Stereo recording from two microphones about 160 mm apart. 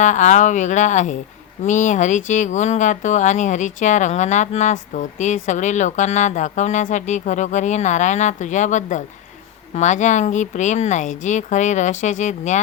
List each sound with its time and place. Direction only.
0.0 s speech: 50° left (ahead or behind)